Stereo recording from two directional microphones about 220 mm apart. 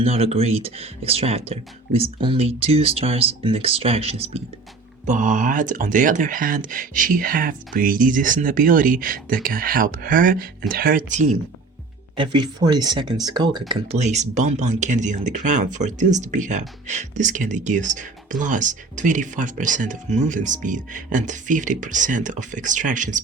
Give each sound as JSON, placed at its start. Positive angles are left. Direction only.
{"t": 0.0, "sound": "speech", "side_deg": -25}
{"t": 12.1, "sound": "speech", "side_deg": -20}